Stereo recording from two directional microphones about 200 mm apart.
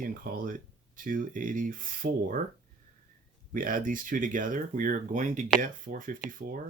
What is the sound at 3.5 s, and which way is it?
Speech, 45° right (ahead or behind).